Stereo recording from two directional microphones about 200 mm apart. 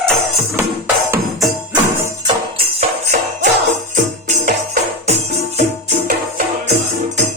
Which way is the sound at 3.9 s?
45° right (ahead or behind).